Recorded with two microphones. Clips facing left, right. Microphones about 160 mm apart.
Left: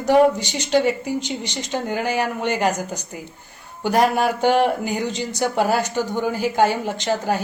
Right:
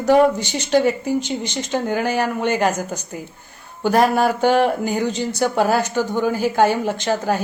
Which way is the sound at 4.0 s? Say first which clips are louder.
Right 1 dB; 45° right (ahead or behind).